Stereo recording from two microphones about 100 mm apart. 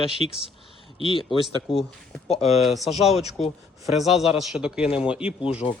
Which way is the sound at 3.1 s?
90° left.